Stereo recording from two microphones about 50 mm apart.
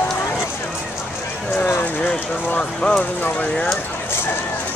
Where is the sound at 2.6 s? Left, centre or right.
Left.